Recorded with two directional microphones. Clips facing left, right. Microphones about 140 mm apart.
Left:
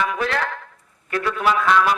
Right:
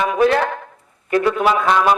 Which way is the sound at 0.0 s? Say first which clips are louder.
Right 7 dB; 25° right (ahead or behind).